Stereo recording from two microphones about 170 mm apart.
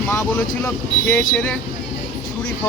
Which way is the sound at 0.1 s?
10° left (ahead or behind).